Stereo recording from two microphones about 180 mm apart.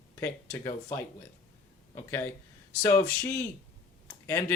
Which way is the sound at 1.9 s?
15° left (ahead or behind).